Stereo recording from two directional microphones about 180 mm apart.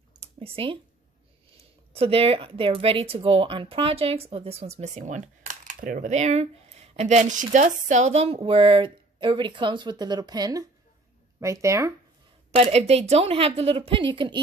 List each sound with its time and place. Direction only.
0.4 s speech: 30° right (ahead or behind)
2.0 s a woman's voice: 35° right (ahead or behind); by 11.9 s 15° right (ahead or behind)
12.4 s speech: 35° right (ahead or behind)